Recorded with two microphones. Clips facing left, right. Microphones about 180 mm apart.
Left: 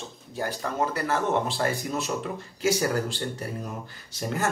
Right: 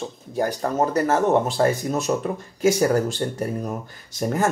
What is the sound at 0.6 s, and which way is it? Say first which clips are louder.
Speech: right 6 dB; 40° right (ahead or behind).